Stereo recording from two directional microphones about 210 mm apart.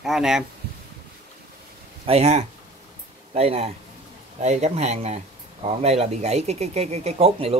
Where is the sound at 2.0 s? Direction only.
30° right (ahead or behind).